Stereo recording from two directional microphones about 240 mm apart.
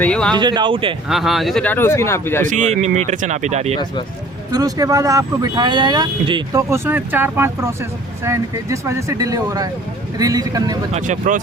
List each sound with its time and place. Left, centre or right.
0.0 s speech: centre
0.3 s speech: centre
1.0 s speech: centre
2.4 s speech: right
4.5 s speech: centre
10.9 s speech: right